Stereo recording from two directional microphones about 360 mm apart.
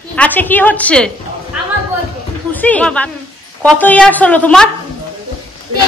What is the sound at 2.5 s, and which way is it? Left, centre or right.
A woman's voice, centre.